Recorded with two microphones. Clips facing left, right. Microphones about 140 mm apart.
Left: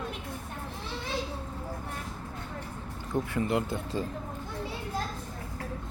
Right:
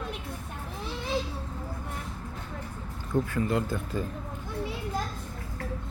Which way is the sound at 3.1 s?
20° left (ahead or behind).